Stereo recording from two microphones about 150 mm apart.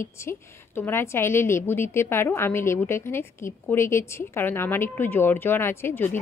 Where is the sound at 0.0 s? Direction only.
15° left (ahead or behind).